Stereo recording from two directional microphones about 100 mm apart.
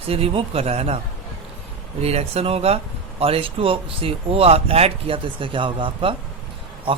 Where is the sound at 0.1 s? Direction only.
75° right (ahead or behind).